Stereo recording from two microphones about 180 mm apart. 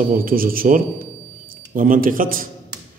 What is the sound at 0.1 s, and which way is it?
A man's voice, 50° right (ahead or behind).